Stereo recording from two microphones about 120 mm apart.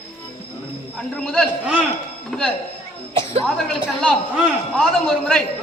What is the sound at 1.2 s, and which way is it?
A man's voice, centre (ahead or behind).